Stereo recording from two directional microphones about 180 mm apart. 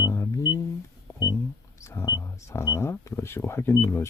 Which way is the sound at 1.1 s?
15° left (ahead or behind).